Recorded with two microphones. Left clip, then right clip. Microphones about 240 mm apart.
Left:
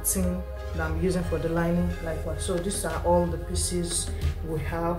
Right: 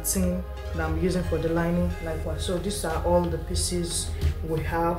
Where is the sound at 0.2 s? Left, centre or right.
Centre.